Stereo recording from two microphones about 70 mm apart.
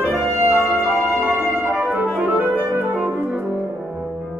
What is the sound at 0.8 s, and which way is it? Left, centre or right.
Music, right.